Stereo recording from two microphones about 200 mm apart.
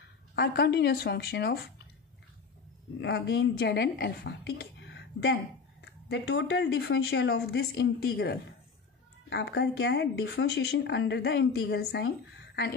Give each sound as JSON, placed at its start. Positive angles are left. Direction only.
{"t": 0.4, "sound": "speech", "side_deg": 55}
{"t": 3.0, "sound": "a woman's voice", "side_deg": 55}